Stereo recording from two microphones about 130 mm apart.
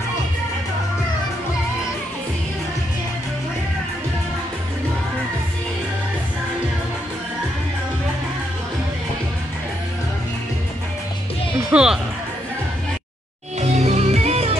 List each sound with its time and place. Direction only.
11.7 s music: 5° right (ahead or behind)
13.6 s music: 60° right (ahead or behind)